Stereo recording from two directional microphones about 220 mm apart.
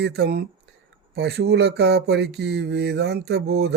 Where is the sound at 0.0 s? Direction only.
50° right (ahead or behind).